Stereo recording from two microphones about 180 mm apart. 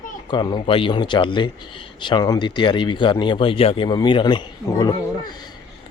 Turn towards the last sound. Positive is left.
turn(degrees=20)  # may be behind; listen again after turning